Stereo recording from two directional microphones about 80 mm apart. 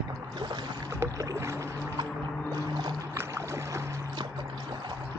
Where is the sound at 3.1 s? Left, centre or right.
Right.